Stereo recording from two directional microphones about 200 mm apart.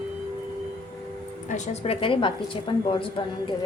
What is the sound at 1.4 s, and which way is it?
A woman's voice, 35° left (ahead or behind).